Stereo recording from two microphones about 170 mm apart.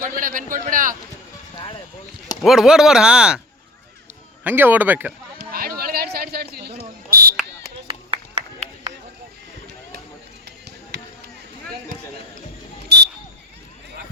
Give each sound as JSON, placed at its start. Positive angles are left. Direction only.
{"t": 0.2, "sound": "a man's voice", "side_deg": -55}
{"t": 2.4, "sound": "speech", "side_deg": 0}
{"t": 4.4, "sound": "speech", "side_deg": -10}
{"t": 5.4, "sound": "fire alarm", "side_deg": -60}
{"t": 7.9, "sound": "clapping", "side_deg": -35}
{"t": 12.9, "sound": "smoke detector", "side_deg": -75}